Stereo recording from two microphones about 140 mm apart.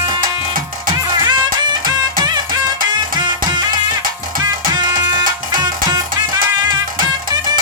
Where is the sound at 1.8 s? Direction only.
30° right (ahead or behind).